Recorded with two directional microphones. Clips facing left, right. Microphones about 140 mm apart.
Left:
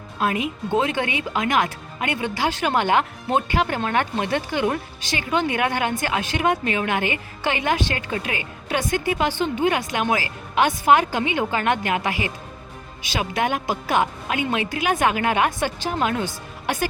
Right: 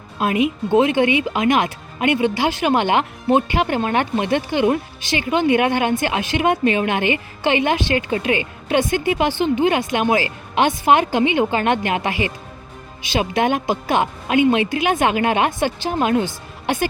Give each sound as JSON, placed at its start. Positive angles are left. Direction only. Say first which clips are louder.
{"t": 0.2, "sound": "speech", "louder": "right 5 dB", "side_deg": -15}